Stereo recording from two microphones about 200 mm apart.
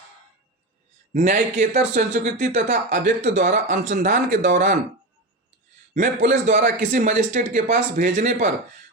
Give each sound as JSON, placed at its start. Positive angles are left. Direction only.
{"t": 1.1, "sound": "speech", "side_deg": -40}
{"t": 3.0, "sound": "speech", "side_deg": -55}
{"t": 3.2, "sound": "speech", "side_deg": -40}
{"t": 5.9, "sound": "speech", "side_deg": -40}